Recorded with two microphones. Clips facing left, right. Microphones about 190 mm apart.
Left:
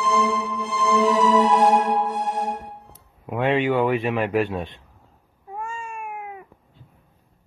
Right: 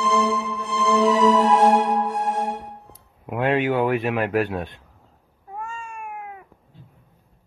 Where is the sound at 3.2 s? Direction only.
5° right (ahead or behind).